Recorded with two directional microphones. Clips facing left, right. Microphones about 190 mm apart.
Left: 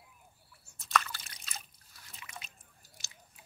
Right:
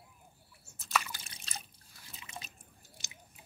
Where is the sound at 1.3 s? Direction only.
30° right (ahead or behind).